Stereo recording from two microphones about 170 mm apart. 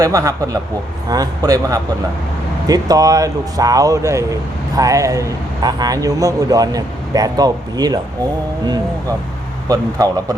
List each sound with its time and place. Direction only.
0.0 s speech: 20° right (ahead or behind)